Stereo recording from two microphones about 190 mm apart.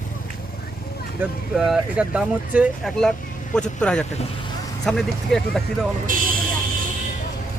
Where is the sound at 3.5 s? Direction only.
5° left (ahead or behind).